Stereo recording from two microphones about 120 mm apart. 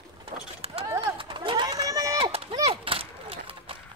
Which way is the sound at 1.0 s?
45° right (ahead or behind).